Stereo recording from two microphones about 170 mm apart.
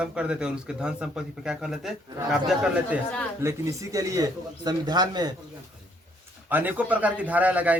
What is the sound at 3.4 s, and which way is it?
Speech, 20° right (ahead or behind).